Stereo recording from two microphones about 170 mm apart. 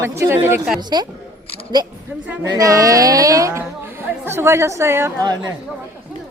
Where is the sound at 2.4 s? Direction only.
20° right (ahead or behind).